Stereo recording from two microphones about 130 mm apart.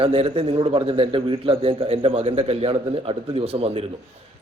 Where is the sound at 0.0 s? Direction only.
45° right (ahead or behind).